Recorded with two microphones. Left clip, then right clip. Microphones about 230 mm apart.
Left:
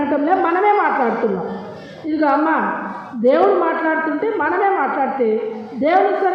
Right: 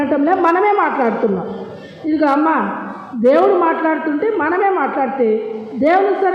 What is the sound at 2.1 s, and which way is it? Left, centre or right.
A woman's voice, right.